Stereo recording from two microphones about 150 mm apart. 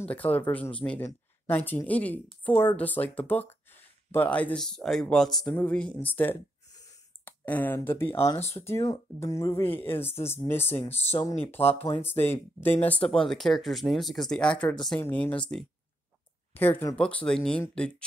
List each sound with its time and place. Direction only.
0.0 s speech: 10° left (ahead or behind)
6.7 s a sound: 25° left (ahead or behind)
7.2 s speech: 10° left (ahead or behind)
11.1 s speech: 25° left (ahead or behind)
11.8 s speech: 15° left (ahead or behind)
16.5 s speech: 15° left (ahead or behind)